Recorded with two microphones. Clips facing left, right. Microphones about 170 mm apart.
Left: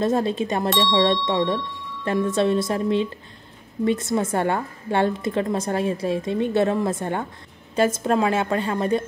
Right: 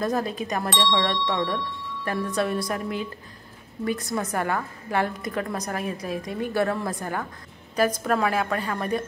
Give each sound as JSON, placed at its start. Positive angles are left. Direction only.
{"t": 0.0, "sound": "a woman's voice", "side_deg": 25}
{"t": 0.7, "sound": "speech", "side_deg": 0}
{"t": 0.9, "sound": "a woman's voice", "side_deg": 25}